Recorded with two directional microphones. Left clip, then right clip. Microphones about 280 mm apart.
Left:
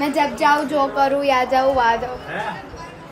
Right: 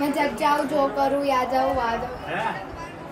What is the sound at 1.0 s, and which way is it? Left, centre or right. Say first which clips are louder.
Speech: left 5 dB; centre.